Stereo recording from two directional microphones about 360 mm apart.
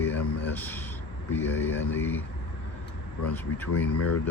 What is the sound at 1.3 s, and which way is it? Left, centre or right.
Speech, centre.